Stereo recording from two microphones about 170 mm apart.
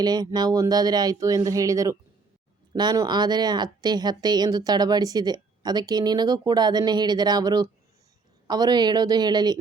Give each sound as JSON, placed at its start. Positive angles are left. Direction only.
{"t": 0.0, "sound": "a woman's voice", "side_deg": -25}